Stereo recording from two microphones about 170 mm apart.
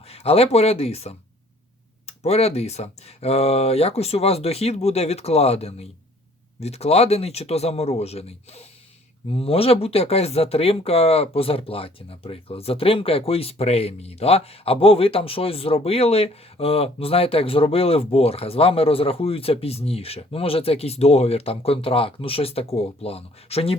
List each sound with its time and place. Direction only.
0.1 s speech: 35° left (ahead or behind)